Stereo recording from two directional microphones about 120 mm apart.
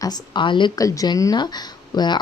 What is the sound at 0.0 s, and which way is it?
Speech, 35° left (ahead or behind).